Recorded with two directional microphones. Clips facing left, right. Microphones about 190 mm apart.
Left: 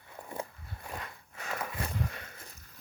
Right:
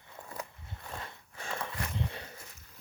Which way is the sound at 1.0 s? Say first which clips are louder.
Even; 30° right (ahead or behind).